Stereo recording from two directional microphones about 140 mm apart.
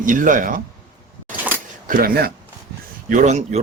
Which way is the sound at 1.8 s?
85° right.